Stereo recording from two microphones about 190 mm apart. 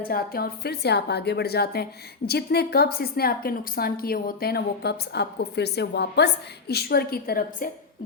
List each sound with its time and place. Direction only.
0.1 s a woman's voice: 55° left (ahead or behind)